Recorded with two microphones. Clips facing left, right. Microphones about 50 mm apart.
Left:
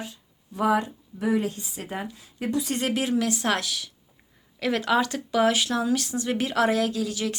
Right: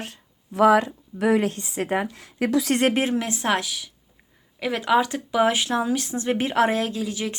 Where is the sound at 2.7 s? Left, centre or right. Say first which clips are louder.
Right 4 dB; right.